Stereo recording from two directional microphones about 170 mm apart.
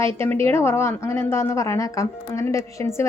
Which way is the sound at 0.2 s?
15° left (ahead or behind).